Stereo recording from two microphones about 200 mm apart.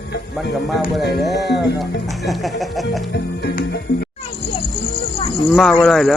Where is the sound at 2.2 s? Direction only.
Centre (ahead or behind).